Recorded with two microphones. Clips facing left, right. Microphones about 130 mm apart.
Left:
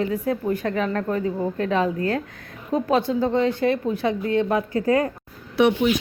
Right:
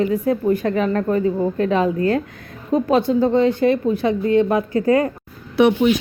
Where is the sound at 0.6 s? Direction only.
15° right (ahead or behind); by 4.4 s centre (ahead or behind).